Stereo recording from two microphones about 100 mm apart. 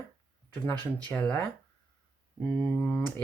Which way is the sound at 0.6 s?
15° left (ahead or behind).